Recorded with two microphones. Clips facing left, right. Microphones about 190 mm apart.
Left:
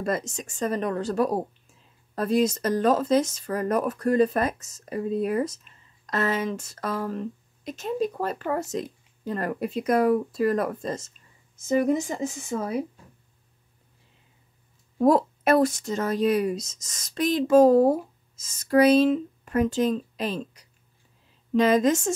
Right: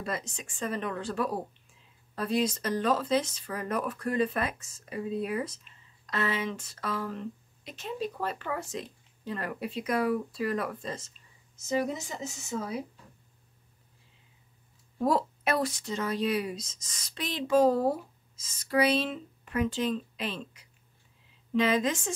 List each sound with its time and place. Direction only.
0.0 s speech: 45° left (ahead or behind)
15.0 s speech: 50° left (ahead or behind)